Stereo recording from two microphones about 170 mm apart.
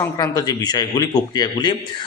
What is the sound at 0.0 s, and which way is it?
A man's voice, 20° left (ahead or behind).